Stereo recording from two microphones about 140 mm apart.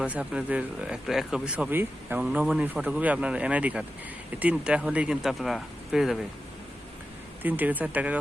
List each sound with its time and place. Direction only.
0.0 s speech: 10° right (ahead or behind)
7.4 s speech: 10° right (ahead or behind)